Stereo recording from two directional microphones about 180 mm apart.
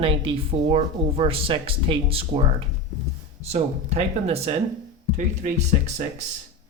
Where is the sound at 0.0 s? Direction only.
30° right (ahead or behind).